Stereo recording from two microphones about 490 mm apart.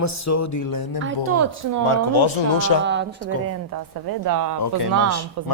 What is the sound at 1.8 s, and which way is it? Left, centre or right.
Speech, left.